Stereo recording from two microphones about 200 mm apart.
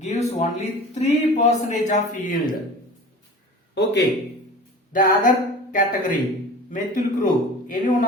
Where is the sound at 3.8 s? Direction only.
60° left (ahead or behind).